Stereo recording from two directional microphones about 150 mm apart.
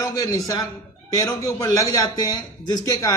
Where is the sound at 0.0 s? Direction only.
25° left (ahead or behind).